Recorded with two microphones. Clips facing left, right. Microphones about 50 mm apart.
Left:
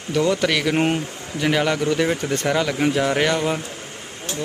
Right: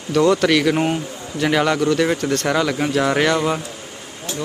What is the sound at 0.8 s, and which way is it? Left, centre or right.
Speech, left.